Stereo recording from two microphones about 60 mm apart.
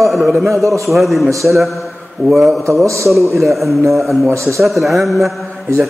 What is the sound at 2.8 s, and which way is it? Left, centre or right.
Speech, right.